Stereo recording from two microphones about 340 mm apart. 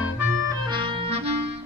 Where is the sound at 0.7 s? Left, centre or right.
Centre.